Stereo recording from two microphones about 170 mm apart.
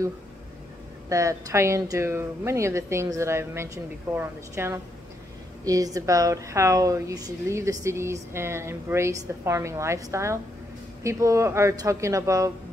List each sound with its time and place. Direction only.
1.0 s a woman's voice: 20° right (ahead or behind)